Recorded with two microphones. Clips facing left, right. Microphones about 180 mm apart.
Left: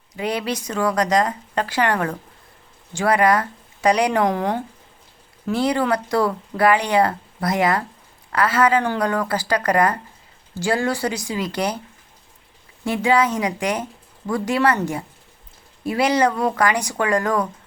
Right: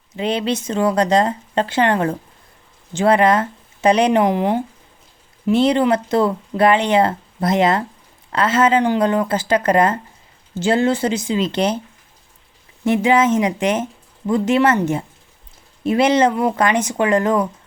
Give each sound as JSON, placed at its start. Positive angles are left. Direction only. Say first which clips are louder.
{"t": 0.1, "sound": "speech", "louder": "right 4 dB", "side_deg": -25}
{"t": 12.8, "sound": "speech", "louder": "right 4 dB", "side_deg": -20}